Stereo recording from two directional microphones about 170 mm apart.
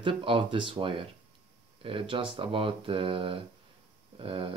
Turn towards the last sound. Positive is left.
turn(degrees=-30)  # may be behind; listen again after turning